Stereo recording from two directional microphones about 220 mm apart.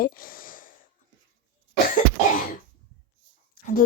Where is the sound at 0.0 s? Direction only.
40° left (ahead or behind).